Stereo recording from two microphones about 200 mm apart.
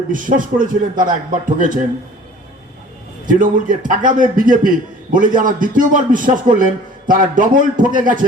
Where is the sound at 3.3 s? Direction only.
40° right (ahead or behind).